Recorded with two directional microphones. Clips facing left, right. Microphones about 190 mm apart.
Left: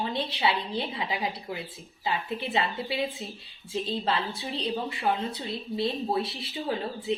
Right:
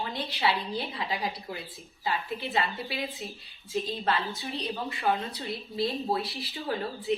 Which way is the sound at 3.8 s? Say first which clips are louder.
Left 3 dB; 30° left (ahead or behind).